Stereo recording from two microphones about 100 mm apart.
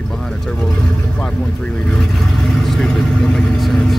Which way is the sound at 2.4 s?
Centre (ahead or behind).